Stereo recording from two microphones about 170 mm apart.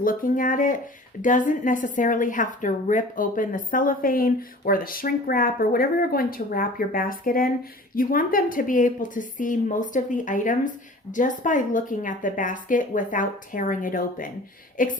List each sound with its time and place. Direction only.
0.0 s a woman's voice: 55° left (ahead or behind)